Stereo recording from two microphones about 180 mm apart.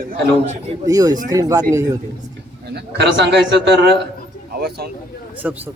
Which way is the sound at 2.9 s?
70° right (ahead or behind).